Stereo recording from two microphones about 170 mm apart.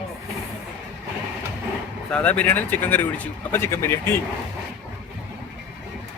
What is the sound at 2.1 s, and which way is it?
Speech, 5° left (ahead or behind).